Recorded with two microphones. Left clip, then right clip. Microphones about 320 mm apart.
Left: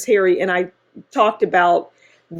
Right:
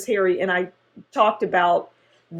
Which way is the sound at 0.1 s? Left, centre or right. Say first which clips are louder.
Left 5 dB; left.